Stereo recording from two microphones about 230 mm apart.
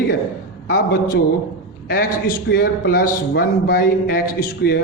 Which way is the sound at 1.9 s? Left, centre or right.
Left.